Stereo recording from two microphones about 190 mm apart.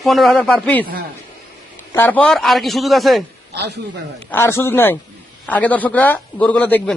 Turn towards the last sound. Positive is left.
turn(degrees=10)  # may be behind; listen again after turning